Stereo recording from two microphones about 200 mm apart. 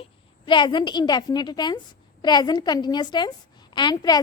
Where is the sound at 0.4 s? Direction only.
25° left (ahead or behind).